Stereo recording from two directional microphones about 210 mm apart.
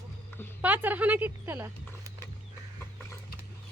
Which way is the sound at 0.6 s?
10° right (ahead or behind).